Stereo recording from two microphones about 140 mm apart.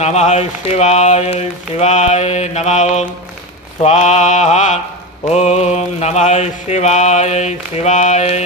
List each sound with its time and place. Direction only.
0.0 s mantra: 50° left (ahead or behind)